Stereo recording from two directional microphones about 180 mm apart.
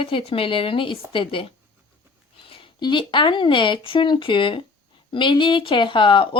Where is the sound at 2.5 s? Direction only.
25° left (ahead or behind).